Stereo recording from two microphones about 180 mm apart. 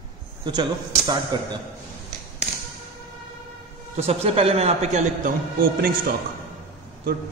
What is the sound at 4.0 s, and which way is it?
A man's voice, 35° right (ahead or behind).